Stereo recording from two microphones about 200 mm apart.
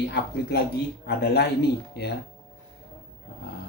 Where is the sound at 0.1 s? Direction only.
55° left (ahead or behind).